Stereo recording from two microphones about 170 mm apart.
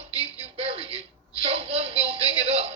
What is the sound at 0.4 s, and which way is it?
Music, 35° right (ahead or behind).